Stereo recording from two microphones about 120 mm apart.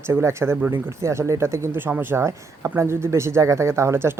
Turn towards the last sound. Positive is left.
turn(degrees=-20)  # may be behind; listen again after turning